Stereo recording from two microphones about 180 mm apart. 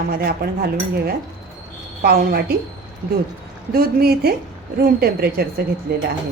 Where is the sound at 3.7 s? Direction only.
60° right (ahead or behind).